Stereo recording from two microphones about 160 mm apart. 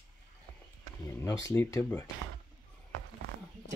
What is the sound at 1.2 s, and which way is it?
Speech, 20° left (ahead or behind).